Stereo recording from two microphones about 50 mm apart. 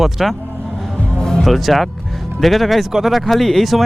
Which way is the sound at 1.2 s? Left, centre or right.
Centre.